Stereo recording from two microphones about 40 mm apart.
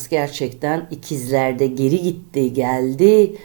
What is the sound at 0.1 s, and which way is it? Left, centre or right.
Speech, centre.